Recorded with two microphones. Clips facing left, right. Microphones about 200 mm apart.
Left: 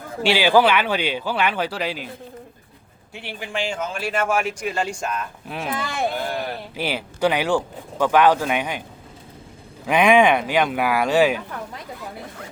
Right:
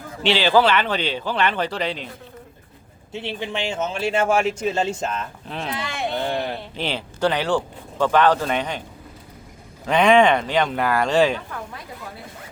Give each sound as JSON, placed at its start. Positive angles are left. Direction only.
{"t": 0.2, "sound": "speech", "side_deg": 10}
{"t": 3.1, "sound": "speech", "side_deg": -25}
{"t": 6.2, "sound": "speech", "side_deg": -15}
{"t": 6.7, "sound": "speech", "side_deg": 10}
{"t": 9.8, "sound": "speech", "side_deg": 10}